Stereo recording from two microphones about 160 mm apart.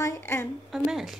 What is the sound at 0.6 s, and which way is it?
Speech, centre (ahead or behind).